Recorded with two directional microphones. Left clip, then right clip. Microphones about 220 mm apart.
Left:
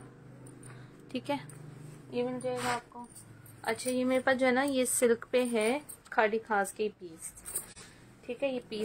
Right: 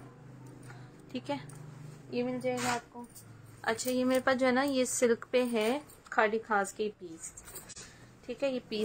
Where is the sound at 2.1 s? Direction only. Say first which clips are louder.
Left 1 dB; 10° right (ahead or behind).